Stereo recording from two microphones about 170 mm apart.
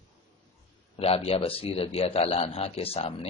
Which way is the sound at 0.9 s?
35° left (ahead or behind).